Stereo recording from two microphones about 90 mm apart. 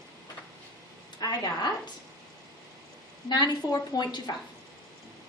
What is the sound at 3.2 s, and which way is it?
A woman's voice, 50° left (ahead or behind).